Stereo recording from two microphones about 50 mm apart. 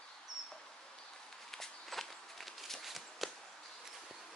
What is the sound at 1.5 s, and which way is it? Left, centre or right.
Walk, centre.